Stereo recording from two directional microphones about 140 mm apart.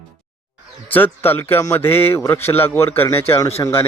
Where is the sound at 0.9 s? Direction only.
15° left (ahead or behind).